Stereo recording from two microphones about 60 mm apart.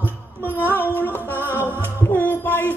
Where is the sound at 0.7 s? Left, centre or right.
Left.